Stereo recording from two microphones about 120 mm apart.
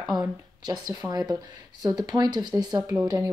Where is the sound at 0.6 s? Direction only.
35° right (ahead or behind).